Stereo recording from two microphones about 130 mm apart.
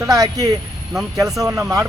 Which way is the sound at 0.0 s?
25° right (ahead or behind).